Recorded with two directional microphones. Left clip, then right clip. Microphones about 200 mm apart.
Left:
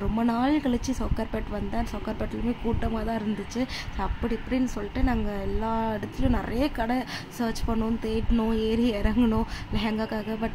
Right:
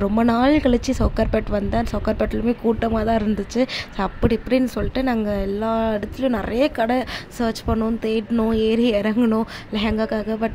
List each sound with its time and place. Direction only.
0.0 s speech: 30° right (ahead or behind)